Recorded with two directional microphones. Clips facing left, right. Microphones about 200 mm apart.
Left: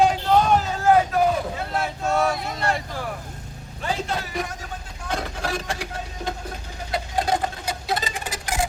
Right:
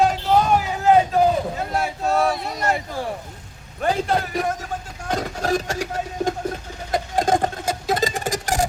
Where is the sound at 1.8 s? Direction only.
Centre (ahead or behind).